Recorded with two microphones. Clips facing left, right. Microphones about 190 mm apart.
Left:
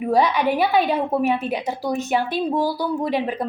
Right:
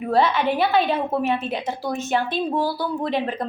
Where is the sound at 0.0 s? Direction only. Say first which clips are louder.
Left 1 dB; 15° left (ahead or behind).